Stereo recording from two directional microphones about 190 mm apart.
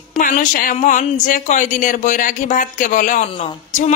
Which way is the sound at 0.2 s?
45° left (ahead or behind).